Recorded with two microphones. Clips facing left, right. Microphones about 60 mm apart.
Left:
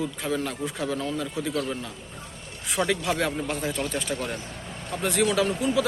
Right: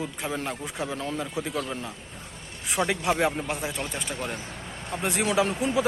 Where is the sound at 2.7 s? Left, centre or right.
Right.